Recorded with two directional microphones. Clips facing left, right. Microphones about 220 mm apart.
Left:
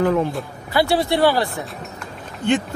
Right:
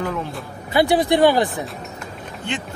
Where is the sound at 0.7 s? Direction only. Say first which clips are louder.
Right 2 dB; 15° right (ahead or behind).